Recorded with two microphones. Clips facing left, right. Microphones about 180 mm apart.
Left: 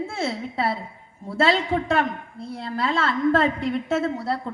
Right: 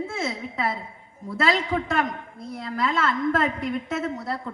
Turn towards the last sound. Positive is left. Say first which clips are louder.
# left 4 dB
turn(degrees=30)  # may be behind; listen again after turning